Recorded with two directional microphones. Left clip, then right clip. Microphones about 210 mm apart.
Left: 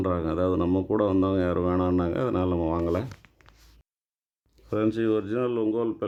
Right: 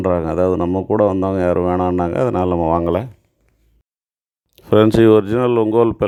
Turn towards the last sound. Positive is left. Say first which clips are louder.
# right 12 dB
turn(degrees=-40)  # may be behind; listen again after turning